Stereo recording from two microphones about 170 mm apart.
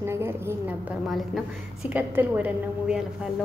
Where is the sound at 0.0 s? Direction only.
15° right (ahead or behind).